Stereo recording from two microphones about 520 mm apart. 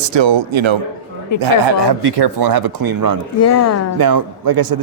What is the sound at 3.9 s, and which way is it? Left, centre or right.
Speech, right.